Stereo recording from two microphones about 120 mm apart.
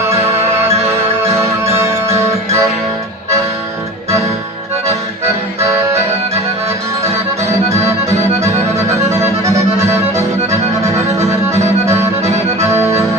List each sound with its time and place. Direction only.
1.6 s music: 25° right (ahead or behind)
4.9 s music: 60° right (ahead or behind)
8.4 s accordion: 25° right (ahead or behind)
10.9 s accordion: 65° right (ahead or behind)
12.6 s music: 25° right (ahead or behind)